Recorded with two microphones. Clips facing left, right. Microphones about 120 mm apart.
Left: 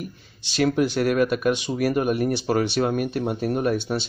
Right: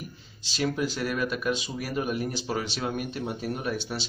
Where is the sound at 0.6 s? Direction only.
65° left (ahead or behind).